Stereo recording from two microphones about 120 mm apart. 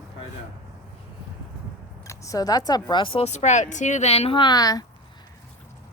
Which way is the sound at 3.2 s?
75° left (ahead or behind).